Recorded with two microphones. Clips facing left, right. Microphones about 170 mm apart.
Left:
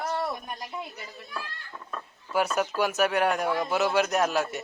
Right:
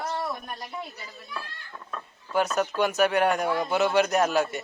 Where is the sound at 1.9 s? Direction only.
5° left (ahead or behind).